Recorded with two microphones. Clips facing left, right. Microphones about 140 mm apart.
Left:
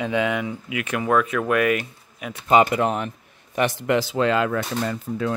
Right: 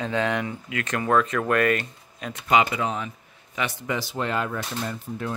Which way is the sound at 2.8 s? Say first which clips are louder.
Left 5 dB; 60° left (ahead or behind).